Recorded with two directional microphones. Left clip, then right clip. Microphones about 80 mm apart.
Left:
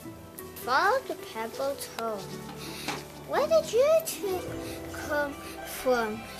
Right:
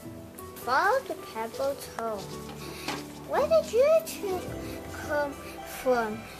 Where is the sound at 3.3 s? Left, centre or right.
Left.